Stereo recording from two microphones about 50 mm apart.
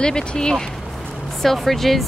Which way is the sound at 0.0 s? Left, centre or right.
Centre.